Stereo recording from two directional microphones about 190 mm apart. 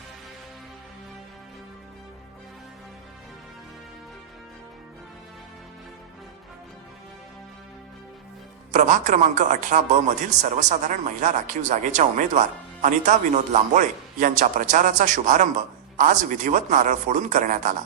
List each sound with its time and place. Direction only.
8.7 s a man's voice: 40° right (ahead or behind)